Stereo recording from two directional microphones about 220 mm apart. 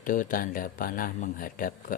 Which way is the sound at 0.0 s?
40° left (ahead or behind).